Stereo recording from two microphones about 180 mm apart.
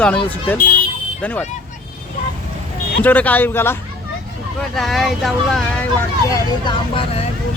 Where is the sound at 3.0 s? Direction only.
10° left (ahead or behind).